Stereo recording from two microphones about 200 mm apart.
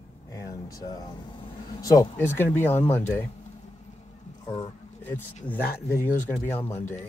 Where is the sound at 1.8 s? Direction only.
15° left (ahead or behind).